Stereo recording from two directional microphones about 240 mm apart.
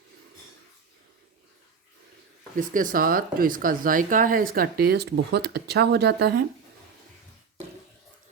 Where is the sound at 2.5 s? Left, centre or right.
Right.